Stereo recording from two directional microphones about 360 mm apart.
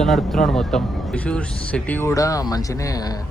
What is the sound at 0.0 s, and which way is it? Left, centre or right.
Speech, centre.